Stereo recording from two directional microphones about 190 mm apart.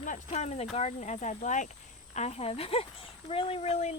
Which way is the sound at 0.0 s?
40° left (ahead or behind).